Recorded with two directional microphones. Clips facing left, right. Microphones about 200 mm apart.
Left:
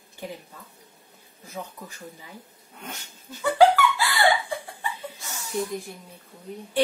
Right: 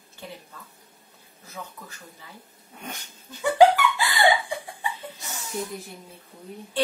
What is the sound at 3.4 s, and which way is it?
Laughter, 15° right (ahead or behind).